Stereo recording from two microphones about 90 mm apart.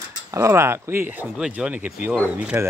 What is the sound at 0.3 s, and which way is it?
Speech, 30° right (ahead or behind).